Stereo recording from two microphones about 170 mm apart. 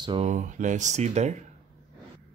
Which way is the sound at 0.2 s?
45° right (ahead or behind).